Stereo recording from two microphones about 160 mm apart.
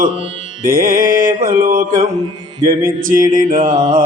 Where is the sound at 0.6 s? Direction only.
60° right (ahead or behind).